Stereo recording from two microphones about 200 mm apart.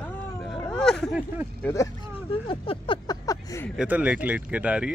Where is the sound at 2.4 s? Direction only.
25° left (ahead or behind).